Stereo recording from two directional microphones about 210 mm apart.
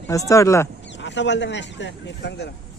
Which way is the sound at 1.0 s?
60° left (ahead or behind).